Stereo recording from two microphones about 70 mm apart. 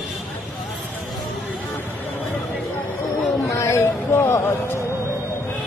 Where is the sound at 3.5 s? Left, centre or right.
Left.